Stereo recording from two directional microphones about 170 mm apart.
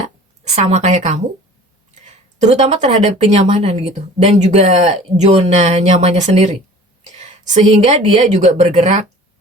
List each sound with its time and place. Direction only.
0.4 s speech: 40° right (ahead or behind)
2.4 s speech: 40° right (ahead or behind)